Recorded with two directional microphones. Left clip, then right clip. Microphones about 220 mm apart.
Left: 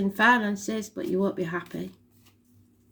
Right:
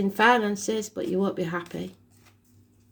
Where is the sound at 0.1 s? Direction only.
30° right (ahead or behind).